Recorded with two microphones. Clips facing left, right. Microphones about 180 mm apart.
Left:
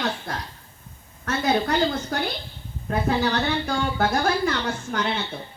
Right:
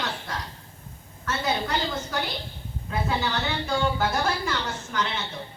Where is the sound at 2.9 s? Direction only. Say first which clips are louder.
Left 5 dB; 55° left (ahead or behind).